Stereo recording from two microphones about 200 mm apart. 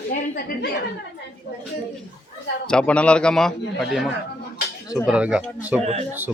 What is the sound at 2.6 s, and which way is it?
Speech, 5° left (ahead or behind).